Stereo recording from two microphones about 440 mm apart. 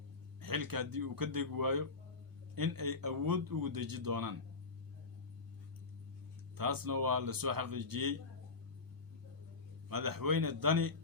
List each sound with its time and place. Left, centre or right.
0.4 s speech: right
6.6 s speech: right
9.9 s speech: right